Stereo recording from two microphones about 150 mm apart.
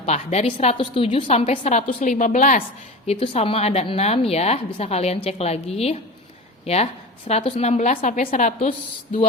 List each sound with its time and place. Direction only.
0.0 s a woman's voice: 45° left (ahead or behind)
3.1 s a woman's voice: 40° left (ahead or behind); by 8.7 s 55° left (ahead or behind)